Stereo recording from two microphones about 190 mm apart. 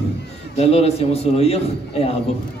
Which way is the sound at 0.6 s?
35° left (ahead or behind).